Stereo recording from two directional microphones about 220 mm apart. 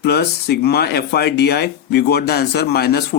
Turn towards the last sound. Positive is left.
turn(degrees=45)  # may be behind; listen again after turning